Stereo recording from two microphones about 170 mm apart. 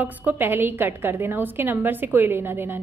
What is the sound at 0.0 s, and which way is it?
A woman's voice, 10° right (ahead or behind).